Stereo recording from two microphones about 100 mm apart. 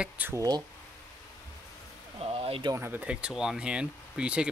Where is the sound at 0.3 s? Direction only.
35° right (ahead or behind).